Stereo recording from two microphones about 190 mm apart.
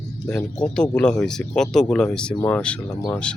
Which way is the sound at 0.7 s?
5° left (ahead or behind).